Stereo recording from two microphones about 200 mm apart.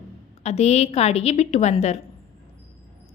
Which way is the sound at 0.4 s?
35° left (ahead or behind).